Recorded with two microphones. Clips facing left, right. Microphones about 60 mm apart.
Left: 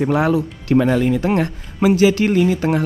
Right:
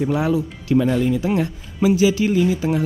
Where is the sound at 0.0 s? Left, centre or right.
Left.